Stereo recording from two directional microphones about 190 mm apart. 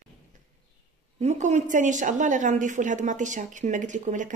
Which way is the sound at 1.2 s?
40° right (ahead or behind).